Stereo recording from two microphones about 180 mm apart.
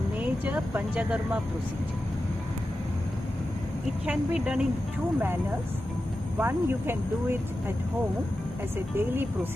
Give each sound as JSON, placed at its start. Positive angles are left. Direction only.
{"t": 0.2, "sound": "speech", "side_deg": -10}
{"t": 4.0, "sound": "speech", "side_deg": -5}
{"t": 6.4, "sound": "speech", "side_deg": -10}
{"t": 8.9, "sound": "speech", "side_deg": -10}